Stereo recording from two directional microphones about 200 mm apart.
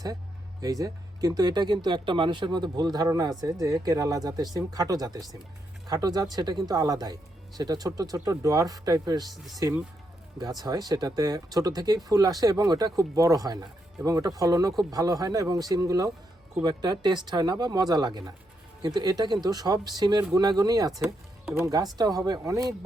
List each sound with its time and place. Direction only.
0.6 s speech: 15° right (ahead or behind)
9.3 s speech: centre (ahead or behind)
9.6 s speech: 15° right (ahead or behind)